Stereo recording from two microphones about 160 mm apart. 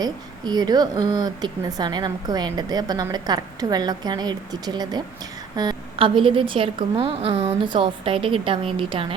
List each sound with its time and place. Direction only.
0.0 s a woman's voice: 25° right (ahead or behind)